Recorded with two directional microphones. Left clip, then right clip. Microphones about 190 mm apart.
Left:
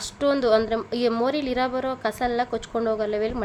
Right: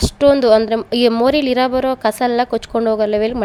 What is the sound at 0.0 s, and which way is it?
A woman's voice, 35° right (ahead or behind).